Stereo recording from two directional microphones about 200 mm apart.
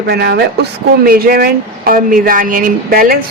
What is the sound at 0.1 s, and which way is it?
A woman's voice, 50° right (ahead or behind).